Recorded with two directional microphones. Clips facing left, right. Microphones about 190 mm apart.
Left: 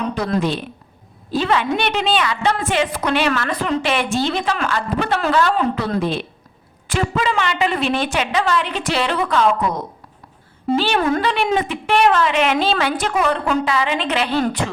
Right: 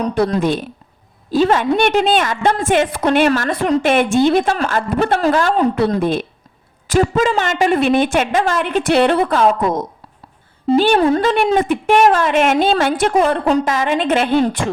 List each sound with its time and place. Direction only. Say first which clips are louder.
0.0 s a woman's voice: right 4 dB; 40° right (ahead or behind)
4.8 s a woman's voice: right 4 dB; 50° right (ahead or behind)
10.8 s a woman's voice: right 6 dB; 50° right (ahead or behind)